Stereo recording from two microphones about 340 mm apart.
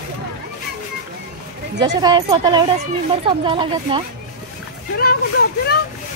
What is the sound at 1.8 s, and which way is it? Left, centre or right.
Speech, centre.